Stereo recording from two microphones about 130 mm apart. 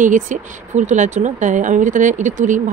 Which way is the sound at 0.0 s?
80° right.